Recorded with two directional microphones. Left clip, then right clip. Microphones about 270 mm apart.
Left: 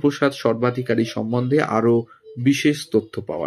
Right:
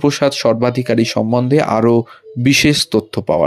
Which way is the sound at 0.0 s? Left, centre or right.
Right.